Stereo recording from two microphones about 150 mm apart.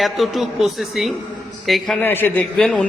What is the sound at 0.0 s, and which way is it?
A man's voice, centre (ahead or behind).